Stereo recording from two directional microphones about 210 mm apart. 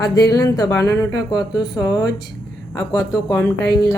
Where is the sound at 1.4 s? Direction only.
Centre (ahead or behind).